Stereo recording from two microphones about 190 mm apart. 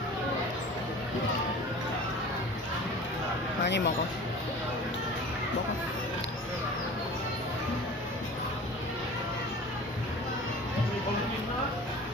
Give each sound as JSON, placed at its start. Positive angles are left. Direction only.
{"t": 3.6, "sound": "speech", "side_deg": 65}